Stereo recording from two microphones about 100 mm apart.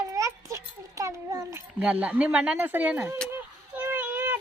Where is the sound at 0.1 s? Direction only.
35° right (ahead or behind).